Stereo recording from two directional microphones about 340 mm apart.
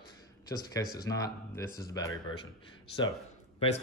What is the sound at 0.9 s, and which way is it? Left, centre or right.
Speech, centre.